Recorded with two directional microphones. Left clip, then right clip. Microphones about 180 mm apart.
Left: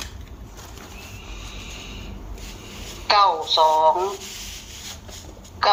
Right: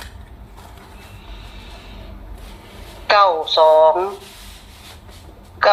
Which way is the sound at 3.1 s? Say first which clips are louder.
Right 3 dB; 25° right (ahead or behind).